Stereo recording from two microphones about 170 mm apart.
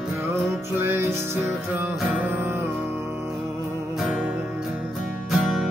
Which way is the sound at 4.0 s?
5° right (ahead or behind).